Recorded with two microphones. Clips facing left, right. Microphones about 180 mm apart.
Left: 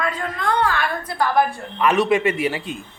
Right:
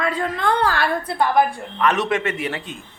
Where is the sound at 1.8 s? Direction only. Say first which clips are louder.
Left 3 dB; 5° left (ahead or behind).